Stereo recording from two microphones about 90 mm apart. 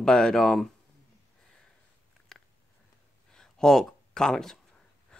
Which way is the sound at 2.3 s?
5° left (ahead or behind).